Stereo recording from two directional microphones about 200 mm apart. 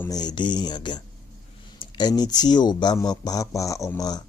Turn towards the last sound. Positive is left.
turn(degrees=20)  # may be behind; listen again after turning